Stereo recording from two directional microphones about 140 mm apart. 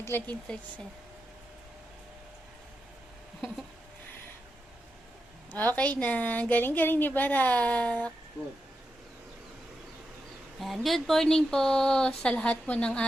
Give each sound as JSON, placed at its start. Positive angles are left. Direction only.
{"t": 0.0, "sound": "speech", "side_deg": 15}
{"t": 0.4, "sound": "speech", "side_deg": 5}
{"t": 5.5, "sound": "a woman's voice", "side_deg": 10}
{"t": 10.8, "sound": "speech", "side_deg": 0}